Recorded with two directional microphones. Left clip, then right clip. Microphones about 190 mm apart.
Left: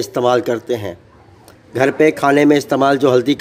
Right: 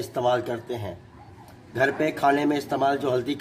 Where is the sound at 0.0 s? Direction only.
45° left (ahead or behind).